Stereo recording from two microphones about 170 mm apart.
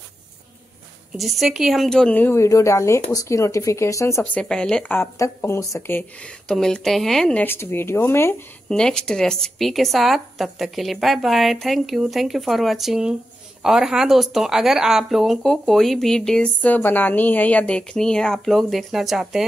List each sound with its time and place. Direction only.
1.1 s speech: centre (ahead or behind)
8.6 s speech: 5° left (ahead or behind)